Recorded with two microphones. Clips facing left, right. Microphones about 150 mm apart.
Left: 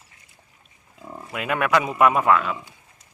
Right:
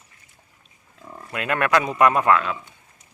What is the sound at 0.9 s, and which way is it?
Livestock, 15° left (ahead or behind).